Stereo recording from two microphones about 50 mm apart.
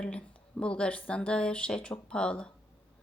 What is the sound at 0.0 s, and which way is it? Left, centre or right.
Speech, left.